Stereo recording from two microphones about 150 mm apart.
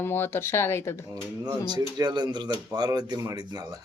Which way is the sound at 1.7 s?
25° right (ahead or behind).